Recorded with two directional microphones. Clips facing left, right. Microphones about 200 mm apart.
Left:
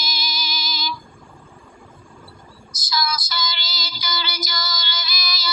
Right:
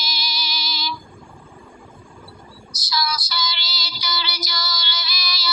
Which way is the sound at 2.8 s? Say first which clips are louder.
Even; 50° left (ahead or behind).